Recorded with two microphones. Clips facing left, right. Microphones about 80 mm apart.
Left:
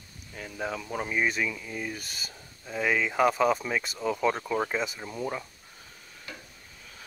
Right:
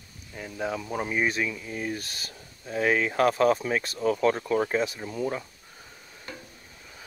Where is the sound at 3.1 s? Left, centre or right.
Centre.